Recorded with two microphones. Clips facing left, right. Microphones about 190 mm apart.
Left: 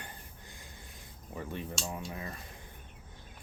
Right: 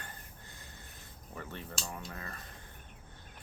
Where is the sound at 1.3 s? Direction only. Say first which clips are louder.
Left 5 dB; 15° left (ahead or behind).